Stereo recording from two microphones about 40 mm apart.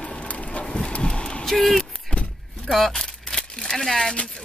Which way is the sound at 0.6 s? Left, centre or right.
Left.